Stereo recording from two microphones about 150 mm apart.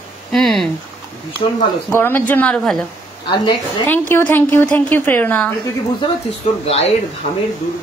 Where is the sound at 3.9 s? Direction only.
15° left (ahead or behind).